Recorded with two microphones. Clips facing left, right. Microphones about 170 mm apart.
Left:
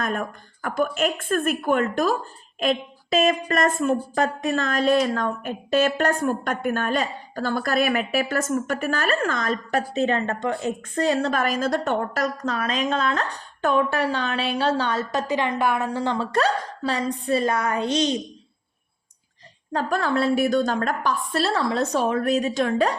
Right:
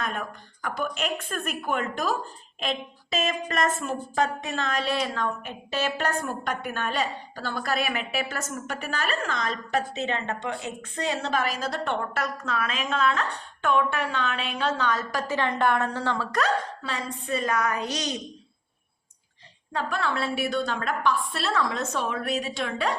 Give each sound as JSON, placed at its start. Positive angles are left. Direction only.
{"t": 0.0, "sound": "a woman's voice", "side_deg": 45}
{"t": 15.3, "sound": "a woman's voice", "side_deg": 15}
{"t": 19.7, "sound": "a woman's voice", "side_deg": 40}